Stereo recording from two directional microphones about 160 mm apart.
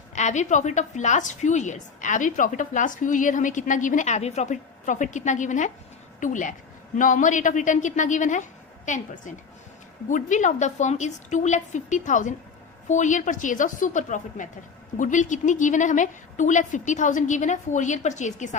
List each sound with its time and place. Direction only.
0.1 s a woman's voice: 45° left (ahead or behind)
10.1 s a woman's voice: 50° left (ahead or behind)